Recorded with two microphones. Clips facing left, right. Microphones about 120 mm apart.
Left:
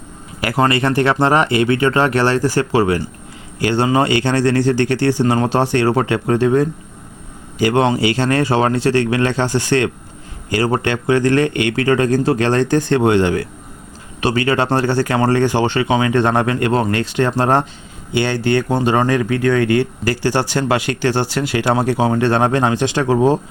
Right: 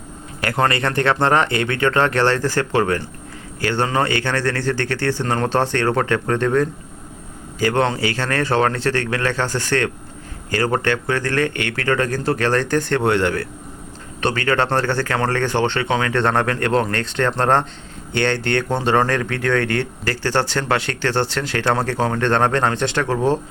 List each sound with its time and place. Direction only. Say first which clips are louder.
0.4 s speech: left 3 dB; 10° left (ahead or behind)